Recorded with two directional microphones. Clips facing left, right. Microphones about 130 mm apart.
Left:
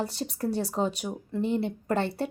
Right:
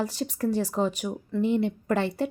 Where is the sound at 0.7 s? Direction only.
Centre (ahead or behind).